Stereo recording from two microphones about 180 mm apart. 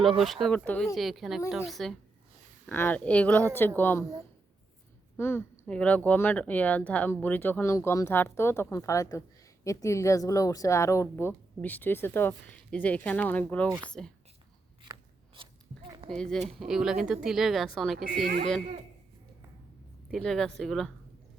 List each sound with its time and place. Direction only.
0.2 s speech: centre (ahead or behind)
5.1 s speech: 15° left (ahead or behind)
16.0 s speech: 5° left (ahead or behind)
18.2 s speech: 55° right (ahead or behind)
20.1 s speech: centre (ahead or behind)